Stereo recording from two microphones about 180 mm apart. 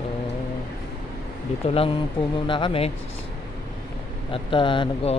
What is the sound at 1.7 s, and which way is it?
Speech, 30° left (ahead or behind).